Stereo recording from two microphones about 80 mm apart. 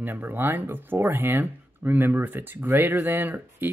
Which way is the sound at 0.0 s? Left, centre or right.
Right.